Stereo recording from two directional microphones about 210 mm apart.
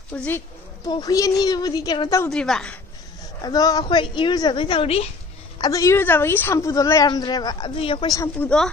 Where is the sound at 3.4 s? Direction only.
15° left (ahead or behind).